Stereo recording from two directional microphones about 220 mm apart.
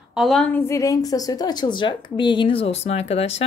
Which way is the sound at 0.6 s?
15° left (ahead or behind).